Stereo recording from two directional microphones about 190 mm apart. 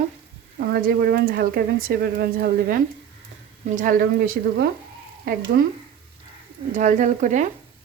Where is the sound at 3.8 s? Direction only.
45° right (ahead or behind).